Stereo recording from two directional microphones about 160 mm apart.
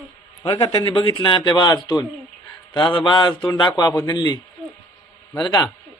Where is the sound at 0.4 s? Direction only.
35° left (ahead or behind).